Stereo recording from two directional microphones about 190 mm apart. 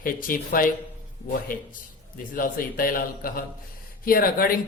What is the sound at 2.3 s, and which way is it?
Speech, 45° left (ahead or behind).